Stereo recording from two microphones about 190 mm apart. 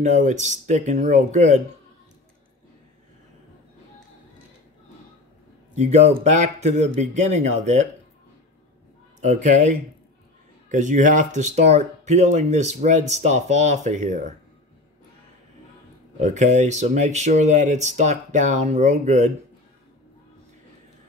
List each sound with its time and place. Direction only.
0.0 s speech: 40° right (ahead or behind)
5.8 s speech: 35° right (ahead or behind)
9.2 s speech: 40° right (ahead or behind)
16.2 s speech: 40° right (ahead or behind)